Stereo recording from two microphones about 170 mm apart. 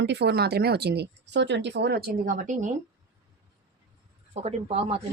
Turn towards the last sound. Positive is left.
turn(degrees=-35)  # may be behind; listen again after turning